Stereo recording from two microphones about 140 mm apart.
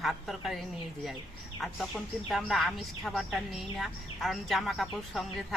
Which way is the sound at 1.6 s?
Centre (ahead or behind).